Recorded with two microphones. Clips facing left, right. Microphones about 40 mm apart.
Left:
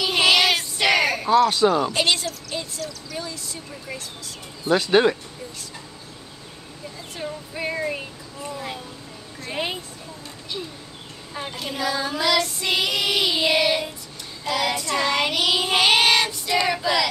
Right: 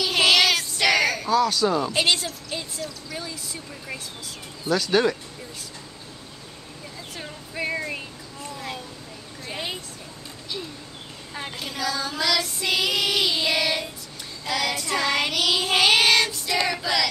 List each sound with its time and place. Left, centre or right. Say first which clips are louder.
0.0 s child singing: left 1 dB; centre
1.3 s speech: left 5 dB; left
1.9 s speech: left 1 dB; centre
2.5 s a sound: left 1 dB; centre
4.6 s speech: left 3 dB; left
7.2 s a sound: left 2 dB; centre
11.3 s a woman's voice: left 2 dB; centre
11.7 s child singing: left 3 dB; centre